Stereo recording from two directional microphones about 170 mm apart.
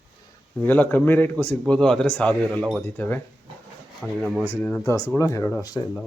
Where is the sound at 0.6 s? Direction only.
10° left (ahead or behind).